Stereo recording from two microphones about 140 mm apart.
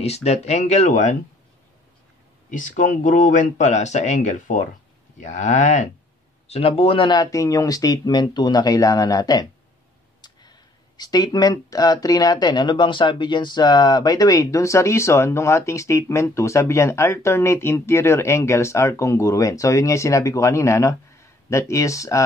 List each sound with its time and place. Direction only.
0.0 s speech: 50° left (ahead or behind)
2.5 s speech: 70° left (ahead or behind)
6.4 s speech: 45° left (ahead or behind); by 22.2 s 20° left (ahead or behind)